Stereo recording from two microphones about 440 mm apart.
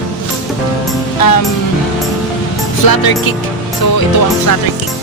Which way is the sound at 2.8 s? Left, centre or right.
Left.